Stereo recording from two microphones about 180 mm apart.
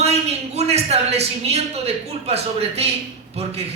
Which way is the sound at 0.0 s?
35° right (ahead or behind).